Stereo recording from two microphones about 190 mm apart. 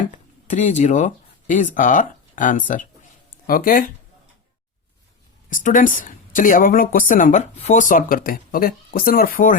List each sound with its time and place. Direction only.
0.1 s a woman's voice: 40° left (ahead or behind)
5.5 s a woman's voice: 45° left (ahead or behind)